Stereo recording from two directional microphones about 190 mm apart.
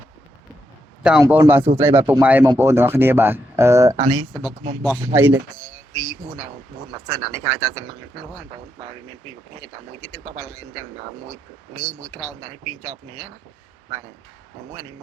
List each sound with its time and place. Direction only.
1.2 s speech: 10° right (ahead or behind)
9.6 s speech: 20° right (ahead or behind)